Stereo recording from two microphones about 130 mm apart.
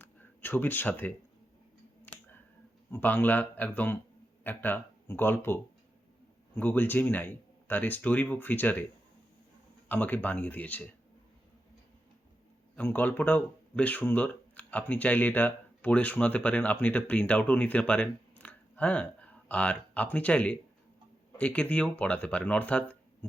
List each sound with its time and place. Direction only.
0.0 s a sound: 15° left (ahead or behind)
2.9 s speech: 15° left (ahead or behind)
6.6 s speech: 15° left (ahead or behind)
9.9 s speech: 15° left (ahead or behind)
12.7 s speech: 15° left (ahead or behind)